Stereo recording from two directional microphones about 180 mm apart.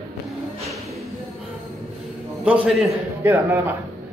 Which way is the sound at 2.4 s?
5° right (ahead or behind).